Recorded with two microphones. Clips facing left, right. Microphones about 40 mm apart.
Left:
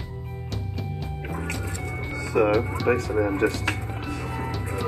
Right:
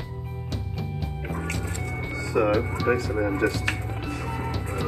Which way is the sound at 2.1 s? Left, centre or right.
Left.